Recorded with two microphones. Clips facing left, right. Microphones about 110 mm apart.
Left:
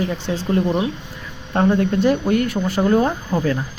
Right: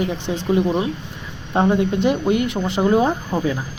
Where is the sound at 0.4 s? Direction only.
5° right (ahead or behind).